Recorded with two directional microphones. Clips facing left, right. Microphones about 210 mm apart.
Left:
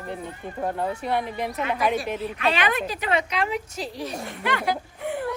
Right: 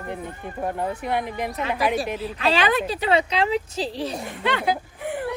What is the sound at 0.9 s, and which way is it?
A woman's voice, 15° right (ahead or behind).